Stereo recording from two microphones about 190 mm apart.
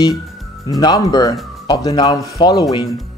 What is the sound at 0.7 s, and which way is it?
Speech, 20° left (ahead or behind).